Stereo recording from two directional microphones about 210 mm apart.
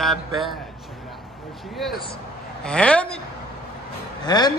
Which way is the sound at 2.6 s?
5° left (ahead or behind).